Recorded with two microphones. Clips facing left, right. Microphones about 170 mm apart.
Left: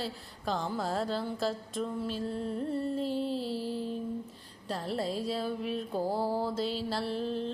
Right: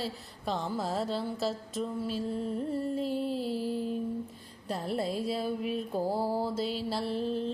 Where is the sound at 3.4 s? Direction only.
45° right (ahead or behind).